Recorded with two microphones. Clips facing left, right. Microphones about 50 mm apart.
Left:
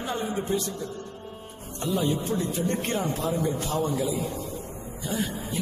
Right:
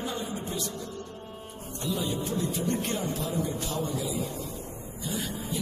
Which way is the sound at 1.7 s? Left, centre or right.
Left.